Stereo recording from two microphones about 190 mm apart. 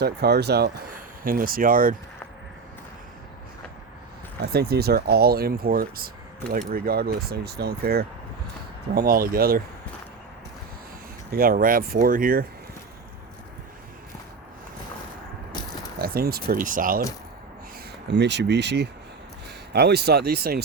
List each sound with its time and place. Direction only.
0.0 s speech: 60° right (ahead or behind)
4.4 s speech: 55° right (ahead or behind)
11.3 s speech: 50° right (ahead or behind)
16.0 s speech: 50° right (ahead or behind)
18.1 s speech: 65° right (ahead or behind)